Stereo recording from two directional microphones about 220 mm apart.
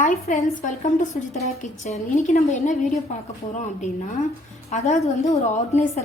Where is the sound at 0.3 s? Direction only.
35° left (ahead or behind).